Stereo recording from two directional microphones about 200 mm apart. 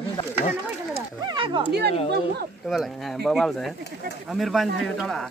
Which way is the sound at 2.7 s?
Centre (ahead or behind).